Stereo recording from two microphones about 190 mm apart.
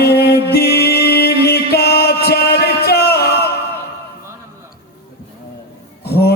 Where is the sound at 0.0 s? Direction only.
55° left (ahead or behind).